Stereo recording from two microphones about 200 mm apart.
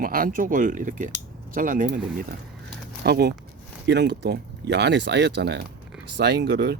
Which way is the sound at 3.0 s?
55° right (ahead or behind).